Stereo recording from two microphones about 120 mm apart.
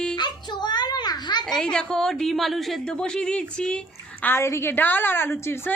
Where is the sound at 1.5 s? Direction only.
5° left (ahead or behind).